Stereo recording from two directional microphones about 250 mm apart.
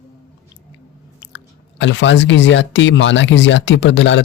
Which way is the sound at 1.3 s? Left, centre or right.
Left.